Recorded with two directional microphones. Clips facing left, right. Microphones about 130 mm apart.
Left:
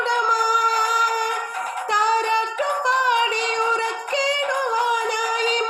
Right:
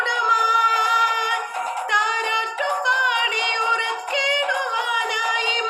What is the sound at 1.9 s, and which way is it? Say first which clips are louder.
Music: left 7 dB; 35° left (ahead or behind).